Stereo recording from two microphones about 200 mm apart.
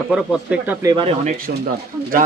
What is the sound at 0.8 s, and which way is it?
Speech, 25° right (ahead or behind).